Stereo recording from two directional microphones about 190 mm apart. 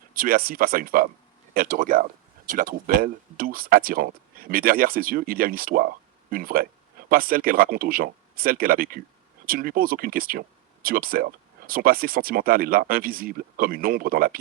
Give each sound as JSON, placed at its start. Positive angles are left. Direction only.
{"t": 0.1, "sound": "speech", "side_deg": -50}